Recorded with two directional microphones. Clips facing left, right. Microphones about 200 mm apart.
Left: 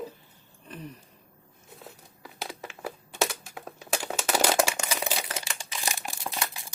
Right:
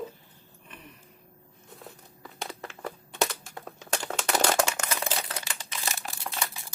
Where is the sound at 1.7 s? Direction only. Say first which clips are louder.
Even; centre (ahead or behind).